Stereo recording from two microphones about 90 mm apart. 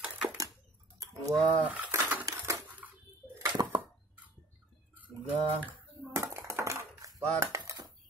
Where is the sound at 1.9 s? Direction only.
20° right (ahead or behind).